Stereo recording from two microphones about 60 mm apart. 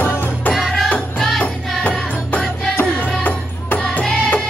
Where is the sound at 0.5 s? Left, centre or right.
Centre.